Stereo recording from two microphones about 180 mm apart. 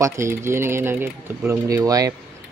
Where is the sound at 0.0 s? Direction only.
15° right (ahead or behind).